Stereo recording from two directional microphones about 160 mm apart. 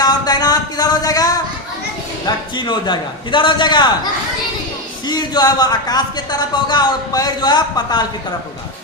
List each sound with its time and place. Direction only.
0.0 s a sound: 25° left (ahead or behind)
2.2 s speech: 30° left (ahead or behind)
5.0 s speech: 25° left (ahead or behind)